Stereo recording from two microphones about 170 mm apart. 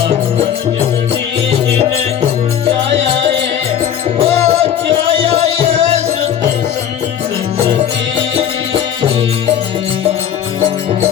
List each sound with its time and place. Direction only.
4.2 s music: 35° right (ahead or behind)
8.4 s music: 30° right (ahead or behind)